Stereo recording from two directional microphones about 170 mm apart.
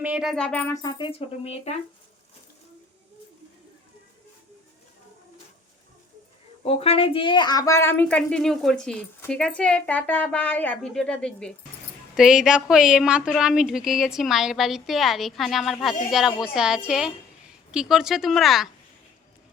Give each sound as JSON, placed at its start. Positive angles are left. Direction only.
{"t": 0.0, "sound": "speech", "side_deg": -5}
{"t": 0.7, "sound": "speech", "side_deg": 20}
{"t": 6.7, "sound": "a woman's voice", "side_deg": 35}